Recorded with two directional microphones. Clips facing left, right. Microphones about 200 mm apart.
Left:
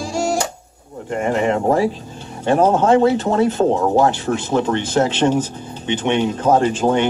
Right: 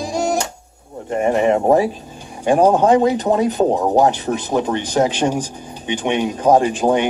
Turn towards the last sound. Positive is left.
turn(degrees=-15)  # may be behind; listen again after turning